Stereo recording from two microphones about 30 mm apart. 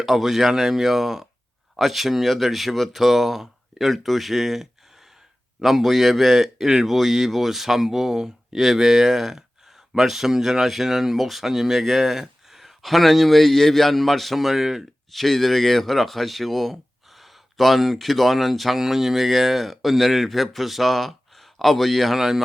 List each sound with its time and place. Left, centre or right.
0.0 s speech: centre
15.1 s speech: centre